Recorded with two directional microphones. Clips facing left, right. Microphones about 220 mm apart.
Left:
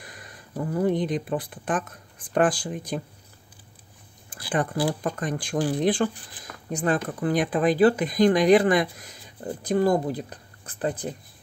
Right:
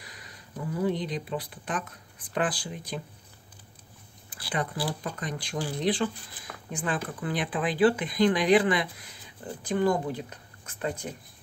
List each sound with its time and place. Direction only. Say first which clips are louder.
0.0 s speech: left 4 dB; 50° left (ahead or behind)
4.5 s speech: left 6 dB; 50° left (ahead or behind)